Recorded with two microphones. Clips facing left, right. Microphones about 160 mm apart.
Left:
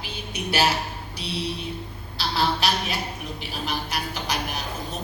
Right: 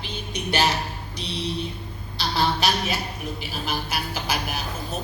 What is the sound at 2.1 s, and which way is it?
A woman's voice, centre (ahead or behind).